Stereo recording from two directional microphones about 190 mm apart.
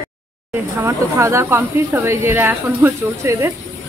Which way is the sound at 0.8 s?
15° right (ahead or behind).